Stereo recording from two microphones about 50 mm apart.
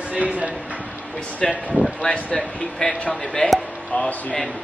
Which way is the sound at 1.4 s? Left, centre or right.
Centre.